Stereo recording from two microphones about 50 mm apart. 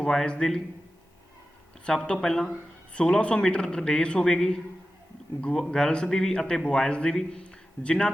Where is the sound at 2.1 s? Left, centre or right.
Centre.